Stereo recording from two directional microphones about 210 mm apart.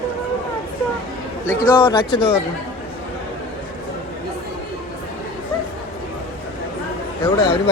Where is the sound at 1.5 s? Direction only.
15° left (ahead or behind).